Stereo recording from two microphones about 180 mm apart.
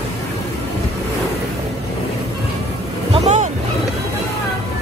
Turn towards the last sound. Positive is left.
turn(degrees=-40)  # may be behind; listen again after turning